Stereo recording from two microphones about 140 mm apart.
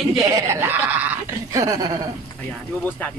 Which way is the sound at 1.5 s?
25° right (ahead or behind).